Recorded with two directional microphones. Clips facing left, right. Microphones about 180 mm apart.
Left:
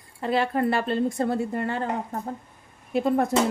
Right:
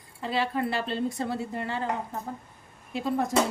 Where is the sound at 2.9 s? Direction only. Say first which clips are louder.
Left 6 dB; 55° left (ahead or behind).